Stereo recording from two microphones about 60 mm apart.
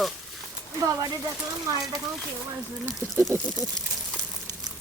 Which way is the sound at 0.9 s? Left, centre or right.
Right.